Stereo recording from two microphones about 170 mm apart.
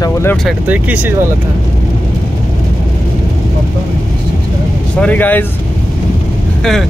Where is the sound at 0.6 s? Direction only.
10° right (ahead or behind).